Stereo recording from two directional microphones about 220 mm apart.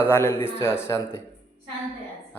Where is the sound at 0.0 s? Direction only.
10° left (ahead or behind).